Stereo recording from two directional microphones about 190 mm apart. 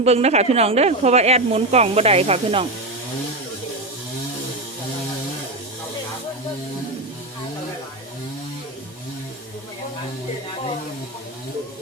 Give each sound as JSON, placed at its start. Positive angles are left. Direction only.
{"t": 0.0, "sound": "speech", "side_deg": -35}